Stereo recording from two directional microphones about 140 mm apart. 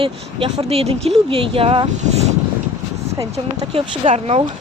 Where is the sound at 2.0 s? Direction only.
55° right (ahead or behind).